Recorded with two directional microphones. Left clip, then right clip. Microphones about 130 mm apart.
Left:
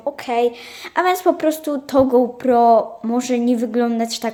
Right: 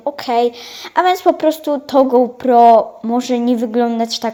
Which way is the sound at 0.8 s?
15° right (ahead or behind).